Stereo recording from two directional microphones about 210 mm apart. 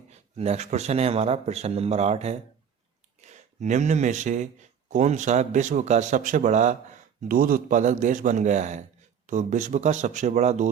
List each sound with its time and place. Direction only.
0.1 s speech: 30° right (ahead or behind)